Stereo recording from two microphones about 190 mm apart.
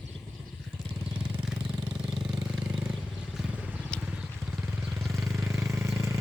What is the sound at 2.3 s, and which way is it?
Vehicle, 15° right (ahead or behind).